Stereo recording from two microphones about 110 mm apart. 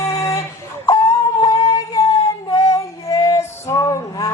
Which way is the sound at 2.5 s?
30° left (ahead or behind).